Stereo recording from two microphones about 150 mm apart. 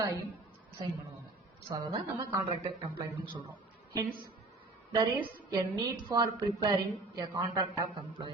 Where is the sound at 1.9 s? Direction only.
35° right (ahead or behind).